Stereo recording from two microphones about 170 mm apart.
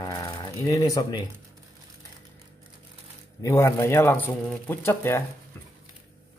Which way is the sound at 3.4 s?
15° left (ahead or behind).